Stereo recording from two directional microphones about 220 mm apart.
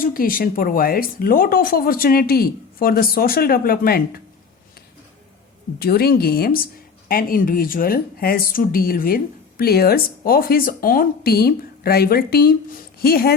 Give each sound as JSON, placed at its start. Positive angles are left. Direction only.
{"t": 0.0, "sound": "speech", "side_deg": 40}
{"t": 5.8, "sound": "speech", "side_deg": 45}